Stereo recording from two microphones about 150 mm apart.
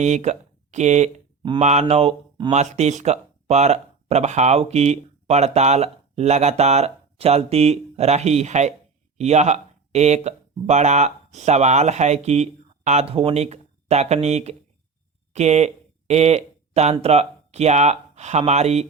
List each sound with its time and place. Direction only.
0.0 s speech: 50° right (ahead or behind)
15.3 s a sound: 50° right (ahead or behind)
17.0 s speech: 45° right (ahead or behind)